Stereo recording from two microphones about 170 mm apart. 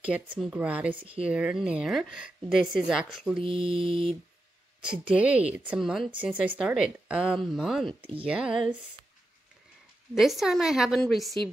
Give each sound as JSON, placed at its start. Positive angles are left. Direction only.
{"t": 0.0, "sound": "speech", "side_deg": -5}
{"t": 0.9, "sound": "mantra", "side_deg": -35}
{"t": 1.2, "sound": "speech", "side_deg": -5}
{"t": 3.3, "sound": "mantra", "side_deg": -30}
{"t": 5.1, "sound": "speech", "side_deg": -5}
{"t": 10.1, "sound": "speech", "side_deg": 0}